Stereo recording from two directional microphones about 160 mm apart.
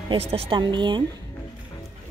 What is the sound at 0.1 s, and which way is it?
Speech, 40° right (ahead or behind).